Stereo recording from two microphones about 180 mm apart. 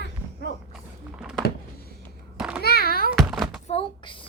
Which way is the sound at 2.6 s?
60° left (ahead or behind).